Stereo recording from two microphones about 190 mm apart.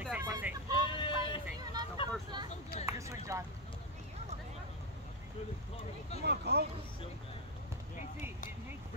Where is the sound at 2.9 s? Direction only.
15° right (ahead or behind).